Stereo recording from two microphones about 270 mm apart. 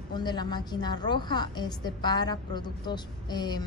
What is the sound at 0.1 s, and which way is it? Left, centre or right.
A woman's voice, centre.